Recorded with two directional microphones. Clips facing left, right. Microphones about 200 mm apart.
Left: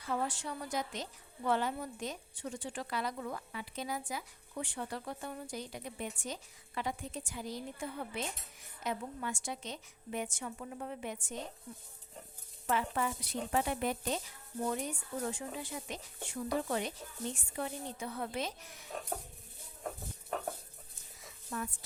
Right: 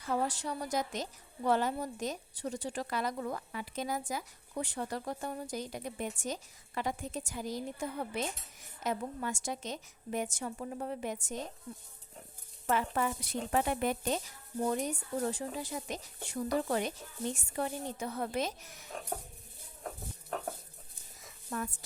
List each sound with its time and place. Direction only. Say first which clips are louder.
0.1 s a woman's voice: right 3 dB; 40° right (ahead or behind)
12.6 s a woman's voice: right 2 dB; 45° right (ahead or behind)
14.7 s a woman's voice: right 4 dB; 40° right (ahead or behind)
21.5 s a woman's voice: right 2 dB; 45° right (ahead or behind)